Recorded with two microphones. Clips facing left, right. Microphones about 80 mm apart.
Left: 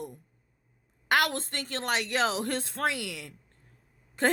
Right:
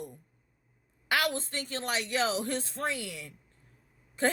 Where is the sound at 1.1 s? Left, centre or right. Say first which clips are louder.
Left 3 dB; left.